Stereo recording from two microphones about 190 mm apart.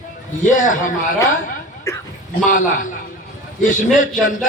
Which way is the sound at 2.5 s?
45° left (ahead or behind).